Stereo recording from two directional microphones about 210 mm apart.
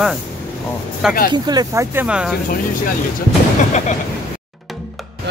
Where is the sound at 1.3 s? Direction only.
20° right (ahead or behind).